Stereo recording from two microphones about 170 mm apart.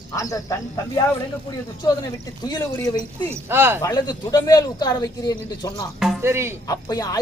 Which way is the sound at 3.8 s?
25° left (ahead or behind).